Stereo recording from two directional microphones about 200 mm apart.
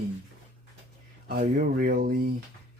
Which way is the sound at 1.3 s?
50° right (ahead or behind).